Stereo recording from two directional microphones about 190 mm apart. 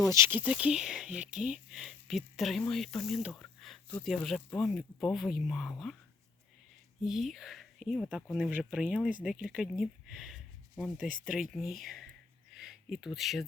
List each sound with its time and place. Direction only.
0.0 s speech: 15° right (ahead or behind); by 6.0 s centre (ahead or behind)
7.0 s speech: centre (ahead or behind)
12.5 s a sound: centre (ahead or behind)